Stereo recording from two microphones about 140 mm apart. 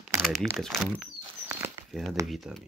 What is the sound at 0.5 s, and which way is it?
Speech, centre (ahead or behind).